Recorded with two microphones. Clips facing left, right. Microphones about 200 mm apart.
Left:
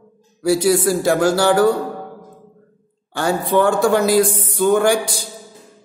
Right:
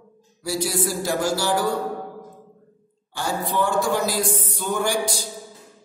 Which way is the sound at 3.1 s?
60° left (ahead or behind).